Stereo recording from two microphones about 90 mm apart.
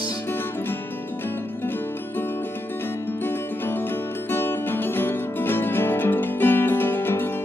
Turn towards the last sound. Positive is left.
turn(degrees=25)  # may be behind; listen again after turning